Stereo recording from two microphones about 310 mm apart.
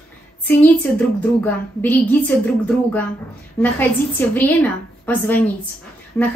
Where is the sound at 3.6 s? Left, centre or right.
Centre.